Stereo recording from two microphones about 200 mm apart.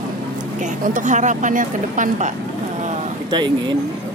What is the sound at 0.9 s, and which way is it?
Speech, 40° right (ahead or behind).